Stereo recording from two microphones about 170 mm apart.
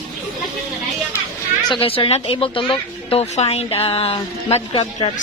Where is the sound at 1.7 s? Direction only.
35° left (ahead or behind).